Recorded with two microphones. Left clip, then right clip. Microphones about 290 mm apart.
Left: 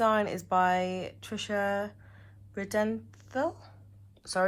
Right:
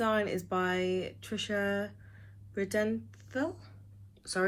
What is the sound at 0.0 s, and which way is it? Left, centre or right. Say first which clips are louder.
Speech: left 4 dB; centre.